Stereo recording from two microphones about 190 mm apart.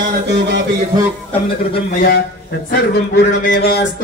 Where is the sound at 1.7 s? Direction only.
55° left (ahead or behind).